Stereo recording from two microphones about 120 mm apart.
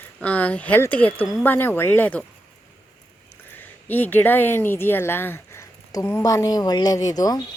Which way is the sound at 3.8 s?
15° left (ahead or behind).